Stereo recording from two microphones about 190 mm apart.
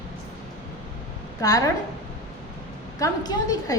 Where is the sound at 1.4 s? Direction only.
20° left (ahead or behind).